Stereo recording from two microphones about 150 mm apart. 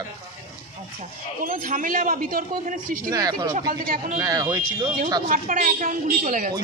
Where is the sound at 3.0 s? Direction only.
25° right (ahead or behind).